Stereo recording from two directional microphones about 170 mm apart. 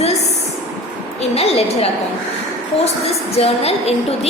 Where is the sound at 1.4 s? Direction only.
35° left (ahead or behind).